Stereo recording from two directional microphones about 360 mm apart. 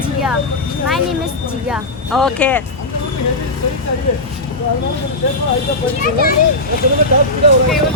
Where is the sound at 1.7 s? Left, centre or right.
Centre.